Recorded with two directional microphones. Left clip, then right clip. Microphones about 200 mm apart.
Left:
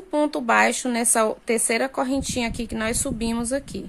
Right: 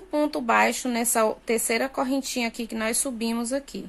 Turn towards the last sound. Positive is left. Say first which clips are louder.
# left 2 dB
turn(degrees=15)  # may be behind; listen again after turning